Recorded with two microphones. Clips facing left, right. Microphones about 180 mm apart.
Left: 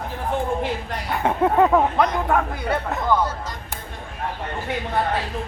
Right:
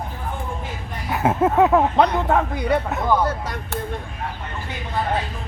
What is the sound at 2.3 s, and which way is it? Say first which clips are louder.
Speech: right 2 dB; 20° right (ahead or behind).